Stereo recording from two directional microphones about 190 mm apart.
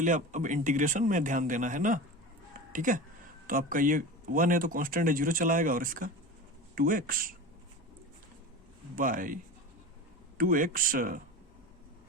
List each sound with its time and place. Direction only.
0.0 s speech: 40° right (ahead or behind)
9.0 s speech: 45° right (ahead or behind)